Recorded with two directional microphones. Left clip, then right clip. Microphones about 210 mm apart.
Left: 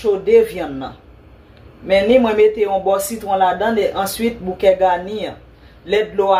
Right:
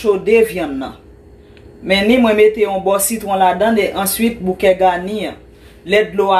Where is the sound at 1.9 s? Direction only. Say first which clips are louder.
Even; 40° right (ahead or behind).